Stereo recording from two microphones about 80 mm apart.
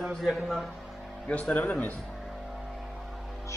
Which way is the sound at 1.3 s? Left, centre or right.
Centre.